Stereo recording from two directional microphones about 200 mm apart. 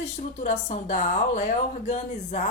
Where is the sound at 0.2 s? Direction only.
35° left (ahead or behind).